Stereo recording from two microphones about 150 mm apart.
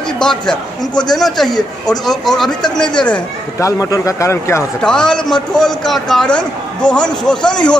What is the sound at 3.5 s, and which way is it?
A man's voice, 20° left (ahead or behind).